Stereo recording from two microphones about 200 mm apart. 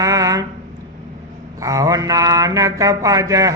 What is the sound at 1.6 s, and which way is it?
Mantra, 15° right (ahead or behind).